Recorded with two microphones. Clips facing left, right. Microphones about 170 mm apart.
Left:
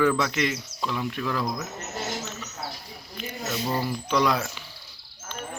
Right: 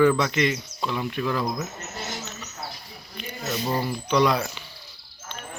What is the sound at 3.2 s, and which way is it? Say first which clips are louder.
Speech: right 1 dB; centre (ahead or behind).